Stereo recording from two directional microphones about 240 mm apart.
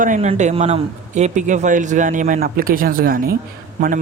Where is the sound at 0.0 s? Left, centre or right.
Right.